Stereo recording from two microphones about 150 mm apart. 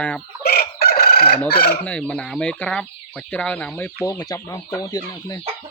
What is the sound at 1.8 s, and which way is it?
Speech, 5° left (ahead or behind).